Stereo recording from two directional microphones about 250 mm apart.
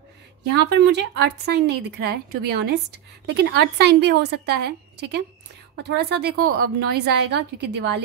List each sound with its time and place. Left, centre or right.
0.4 s a woman's voice: right